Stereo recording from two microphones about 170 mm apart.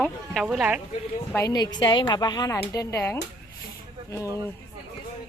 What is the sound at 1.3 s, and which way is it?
A woman's voice, 20° left (ahead or behind).